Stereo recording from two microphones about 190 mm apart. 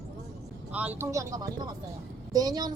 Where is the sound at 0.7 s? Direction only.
10° right (ahead or behind).